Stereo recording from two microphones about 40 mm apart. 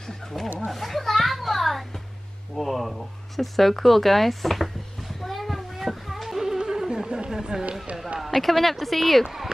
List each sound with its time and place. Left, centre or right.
0.3 s a woman's voice: centre
0.7 s a sound: centre
6.6 s music: centre
7.2 s run: centre
8.4 s a woman's voice: centre